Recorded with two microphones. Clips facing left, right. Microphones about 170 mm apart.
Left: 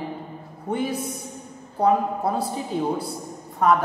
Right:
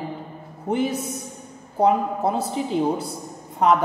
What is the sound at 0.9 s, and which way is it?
Speech, centre (ahead or behind).